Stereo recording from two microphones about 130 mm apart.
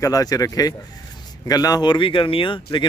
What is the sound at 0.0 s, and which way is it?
Speech, 30° left (ahead or behind).